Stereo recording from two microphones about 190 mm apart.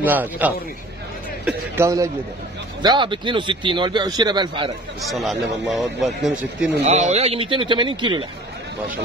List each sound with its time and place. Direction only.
0.0 s a man's voice: 10° right (ahead or behind)
5.1 s a man's voice: centre (ahead or behind)
6.8 s a man's voice: 35° right (ahead or behind)